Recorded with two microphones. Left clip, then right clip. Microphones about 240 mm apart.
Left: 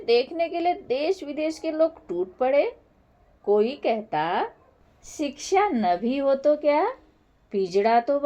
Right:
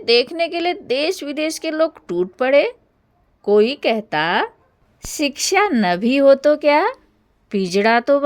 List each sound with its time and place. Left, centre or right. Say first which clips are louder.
0.0 s a woman's voice: right 6 dB; right